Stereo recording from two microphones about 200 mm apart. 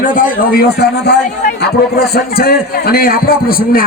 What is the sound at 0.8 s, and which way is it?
A man's voice, 50° left (ahead or behind).